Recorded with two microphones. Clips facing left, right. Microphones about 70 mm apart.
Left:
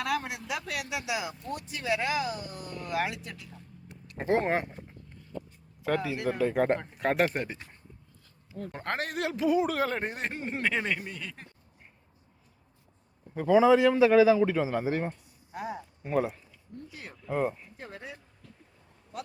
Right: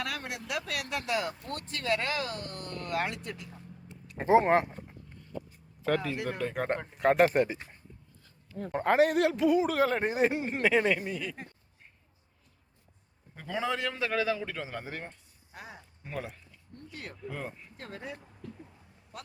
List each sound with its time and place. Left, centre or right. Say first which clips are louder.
0.0 s speech: left 5 dB; centre
8.7 s speech: right 10 dB; centre
13.3 s a man's voice: left 12 dB; centre
16.9 s speech: right 2 dB; centre
17.2 s speech: left 10 dB; left
17.7 s speech: right 1 dB; centre